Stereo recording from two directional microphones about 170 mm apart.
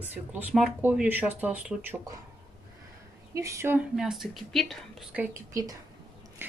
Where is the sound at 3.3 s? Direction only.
20° right (ahead or behind).